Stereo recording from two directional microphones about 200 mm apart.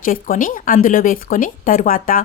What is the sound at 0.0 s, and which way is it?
Speech, 45° left (ahead or behind).